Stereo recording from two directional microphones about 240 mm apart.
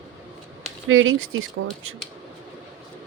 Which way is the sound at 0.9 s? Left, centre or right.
Right.